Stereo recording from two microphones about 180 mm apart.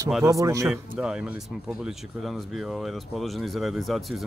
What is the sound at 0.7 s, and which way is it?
Speech, 5° right (ahead or behind).